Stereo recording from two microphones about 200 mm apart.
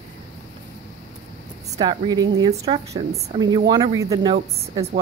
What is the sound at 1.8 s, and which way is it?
A woman's voice, 20° right (ahead or behind).